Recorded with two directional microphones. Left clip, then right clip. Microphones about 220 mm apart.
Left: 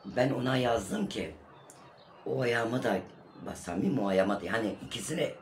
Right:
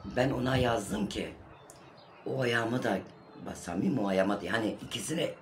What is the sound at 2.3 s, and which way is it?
Speech, 5° right (ahead or behind).